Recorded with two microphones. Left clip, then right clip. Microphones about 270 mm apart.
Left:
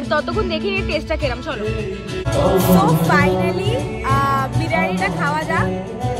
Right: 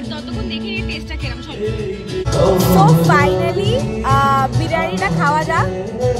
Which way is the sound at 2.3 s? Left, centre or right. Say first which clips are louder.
Right 2 dB; centre.